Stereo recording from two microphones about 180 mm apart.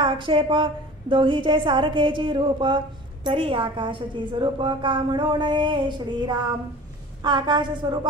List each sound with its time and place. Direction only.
0.0 s a woman's voice: 25° right (ahead or behind)